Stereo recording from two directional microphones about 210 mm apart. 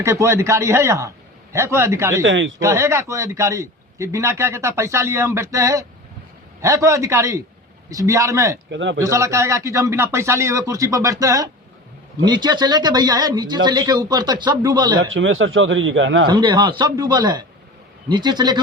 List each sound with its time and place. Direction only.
0.0 s a man's voice: 15° right (ahead or behind)
2.2 s speech: 60° right (ahead or behind)
2.6 s a man's voice: 15° right (ahead or behind)
8.7 s speech: 60° right (ahead or behind)
9.0 s a man's voice: 15° right (ahead or behind)
15.0 s speech: 70° right (ahead or behind)
16.2 s speech: 20° right (ahead or behind)